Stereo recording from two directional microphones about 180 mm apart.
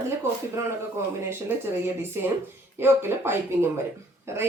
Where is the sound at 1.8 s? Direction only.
15° right (ahead or behind).